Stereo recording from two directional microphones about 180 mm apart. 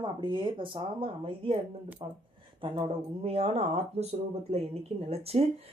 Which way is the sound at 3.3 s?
35° right (ahead or behind).